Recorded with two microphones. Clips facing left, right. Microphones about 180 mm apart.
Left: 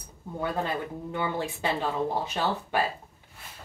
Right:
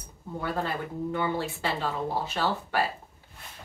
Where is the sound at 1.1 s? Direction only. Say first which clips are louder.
Left 1 dB; 15° left (ahead or behind).